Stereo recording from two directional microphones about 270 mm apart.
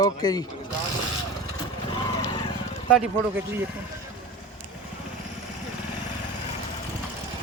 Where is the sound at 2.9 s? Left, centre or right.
Centre.